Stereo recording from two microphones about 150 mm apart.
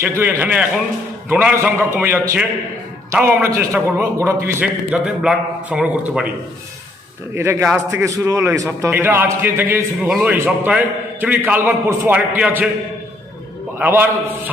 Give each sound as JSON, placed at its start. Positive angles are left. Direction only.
{"t": 0.0, "sound": "a man's voice", "side_deg": -15}
{"t": 4.9, "sound": "a man's voice", "side_deg": -5}
{"t": 7.3, "sound": "a man's voice", "side_deg": -15}
{"t": 10.1, "sound": "a man's voice", "side_deg": 0}
{"t": 10.3, "sound": "a man's voice", "side_deg": -15}
{"t": 13.7, "sound": "a man's voice", "side_deg": -15}